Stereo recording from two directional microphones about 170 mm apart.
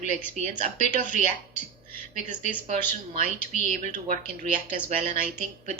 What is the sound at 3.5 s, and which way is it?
Speech, 50° left (ahead or behind).